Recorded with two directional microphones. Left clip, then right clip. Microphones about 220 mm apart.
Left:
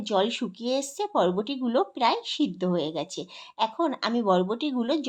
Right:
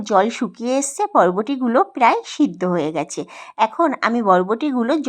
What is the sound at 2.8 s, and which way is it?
Speech, 20° right (ahead or behind).